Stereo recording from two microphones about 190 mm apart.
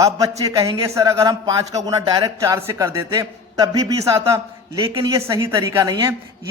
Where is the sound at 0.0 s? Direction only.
20° right (ahead or behind).